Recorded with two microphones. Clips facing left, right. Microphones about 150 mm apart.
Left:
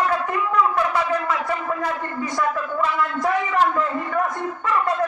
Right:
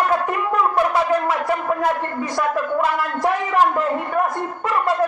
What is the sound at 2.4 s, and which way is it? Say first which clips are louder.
Speech: right 3 dB; 70° right (ahead or behind).